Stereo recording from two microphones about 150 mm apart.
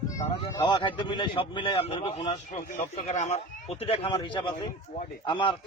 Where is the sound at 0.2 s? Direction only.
25° left (ahead or behind).